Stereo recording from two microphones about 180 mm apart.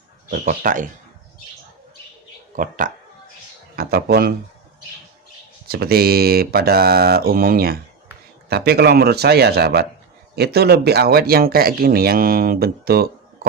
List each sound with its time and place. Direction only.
0.3 s speech: 45° right (ahead or behind)
2.6 s speech: 50° right (ahead or behind)
3.8 s speech: 60° right (ahead or behind)
5.6 s speech: 60° right (ahead or behind)